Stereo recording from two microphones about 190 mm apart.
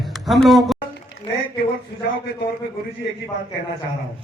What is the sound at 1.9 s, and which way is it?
Speech, 55° left (ahead or behind).